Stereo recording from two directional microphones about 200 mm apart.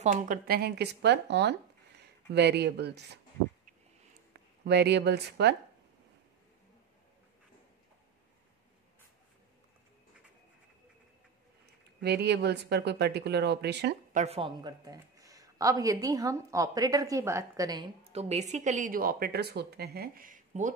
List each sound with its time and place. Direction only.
0.0 s speech: 40° right (ahead or behind); by 3.2 s 55° right (ahead or behind)
4.6 s speech: 55° right (ahead or behind)
12.0 s speech: 55° right (ahead or behind)
14.1 s speech: 30° right (ahead or behind)